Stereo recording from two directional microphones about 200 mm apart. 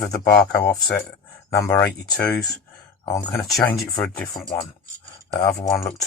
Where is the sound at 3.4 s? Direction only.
Centre (ahead or behind).